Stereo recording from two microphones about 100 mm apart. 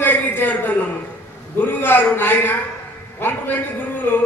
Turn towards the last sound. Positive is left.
turn(degrees=20)  # may be behind; listen again after turning